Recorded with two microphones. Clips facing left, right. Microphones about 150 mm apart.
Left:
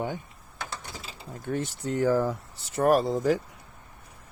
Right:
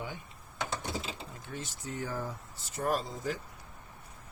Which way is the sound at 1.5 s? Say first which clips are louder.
Left 12 dB; 60° left (ahead or behind).